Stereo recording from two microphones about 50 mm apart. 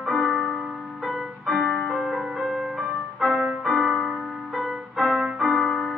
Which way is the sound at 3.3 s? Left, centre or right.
Centre.